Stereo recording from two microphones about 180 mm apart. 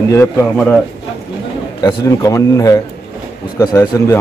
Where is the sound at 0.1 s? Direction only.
10° left (ahead or behind).